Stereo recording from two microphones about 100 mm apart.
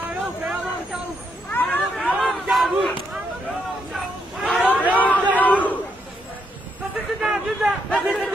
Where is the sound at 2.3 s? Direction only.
Centre (ahead or behind).